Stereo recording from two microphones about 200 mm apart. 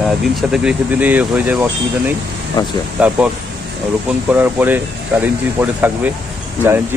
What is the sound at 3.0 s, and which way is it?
Speech, 5° right (ahead or behind).